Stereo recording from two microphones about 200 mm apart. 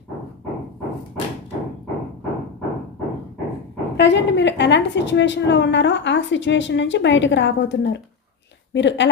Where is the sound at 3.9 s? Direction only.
60° left (ahead or behind).